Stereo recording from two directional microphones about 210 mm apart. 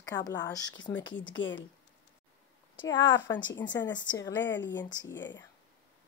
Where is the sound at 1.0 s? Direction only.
65° left (ahead or behind).